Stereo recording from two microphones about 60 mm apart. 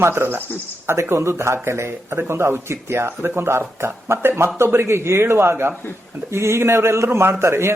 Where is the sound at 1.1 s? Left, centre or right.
Right.